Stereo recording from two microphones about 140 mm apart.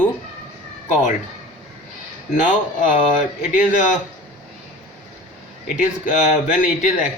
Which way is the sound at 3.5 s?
60° left (ahead or behind).